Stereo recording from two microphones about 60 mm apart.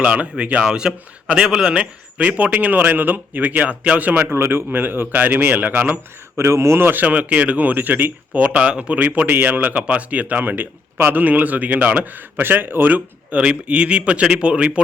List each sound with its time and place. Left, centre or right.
0.0 s speech: centre
4.3 s speech: right
6.3 s speech: right
8.3 s speech: right